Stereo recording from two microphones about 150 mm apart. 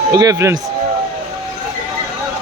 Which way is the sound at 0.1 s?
25° right (ahead or behind).